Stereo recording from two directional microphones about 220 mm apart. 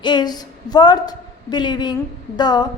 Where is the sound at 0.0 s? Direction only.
20° left (ahead or behind).